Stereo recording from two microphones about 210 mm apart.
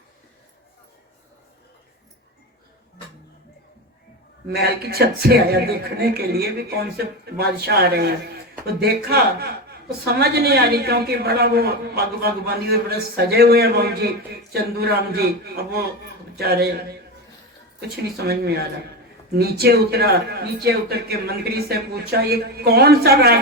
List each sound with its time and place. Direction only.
4.4 s a man's voice: 50° right (ahead or behind)
17.7 s a man's voice: 50° right (ahead or behind)